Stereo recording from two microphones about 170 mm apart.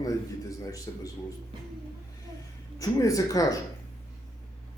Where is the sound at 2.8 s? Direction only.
20° left (ahead or behind).